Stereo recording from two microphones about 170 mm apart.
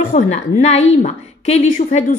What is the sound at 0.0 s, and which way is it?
A woman's voice, 45° left (ahead or behind).